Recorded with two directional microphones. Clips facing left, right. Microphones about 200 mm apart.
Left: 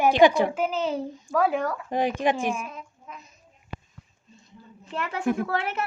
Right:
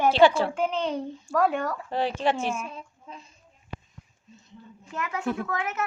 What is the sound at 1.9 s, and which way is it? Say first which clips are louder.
Speech: left 2 dB; 15° left (ahead or behind).